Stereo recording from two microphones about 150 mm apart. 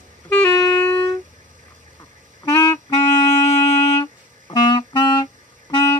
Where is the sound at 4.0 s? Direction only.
30° left (ahead or behind).